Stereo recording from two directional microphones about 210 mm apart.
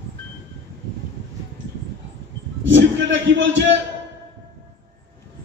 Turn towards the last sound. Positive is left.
turn(degrees=-60)  # may be behind; listen again after turning